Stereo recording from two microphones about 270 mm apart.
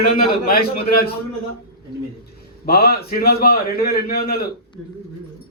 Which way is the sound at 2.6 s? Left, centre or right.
Left.